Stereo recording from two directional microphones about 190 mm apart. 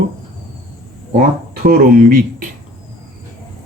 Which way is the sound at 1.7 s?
50° right (ahead or behind).